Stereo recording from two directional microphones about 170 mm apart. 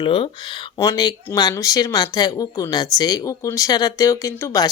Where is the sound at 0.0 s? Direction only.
30° left (ahead or behind).